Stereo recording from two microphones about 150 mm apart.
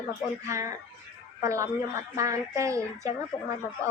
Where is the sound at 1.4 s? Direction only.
20° right (ahead or behind).